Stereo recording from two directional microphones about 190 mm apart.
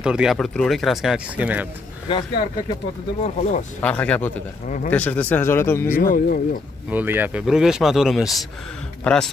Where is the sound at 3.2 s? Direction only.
35° left (ahead or behind).